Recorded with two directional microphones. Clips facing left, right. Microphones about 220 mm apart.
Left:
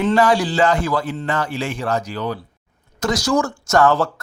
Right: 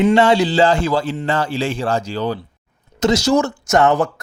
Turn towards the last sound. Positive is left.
turn(degrees=-20)  # may be behind; listen again after turning